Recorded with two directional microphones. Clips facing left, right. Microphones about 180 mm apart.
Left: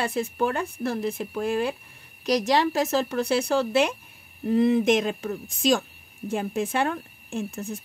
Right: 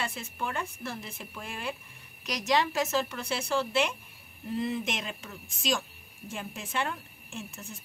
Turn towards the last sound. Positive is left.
turn(degrees=55)  # may be behind; listen again after turning